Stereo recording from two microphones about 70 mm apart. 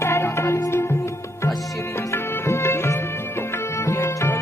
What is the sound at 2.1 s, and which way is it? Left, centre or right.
Music, left.